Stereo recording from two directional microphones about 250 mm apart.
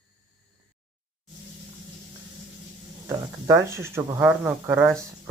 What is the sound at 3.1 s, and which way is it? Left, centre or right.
Speech, centre.